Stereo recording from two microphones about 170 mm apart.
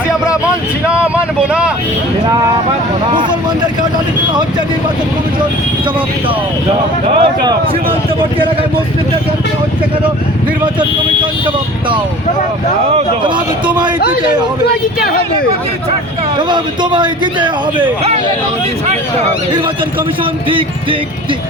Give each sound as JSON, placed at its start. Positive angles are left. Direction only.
{"t": 0.9, "sound": "speech", "side_deg": -5}
{"t": 7.2, "sound": "a man's voice", "side_deg": -30}
{"t": 16.5, "sound": "a man's voice", "side_deg": -25}